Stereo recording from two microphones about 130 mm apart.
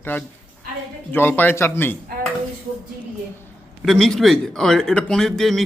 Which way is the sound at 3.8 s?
5° left (ahead or behind).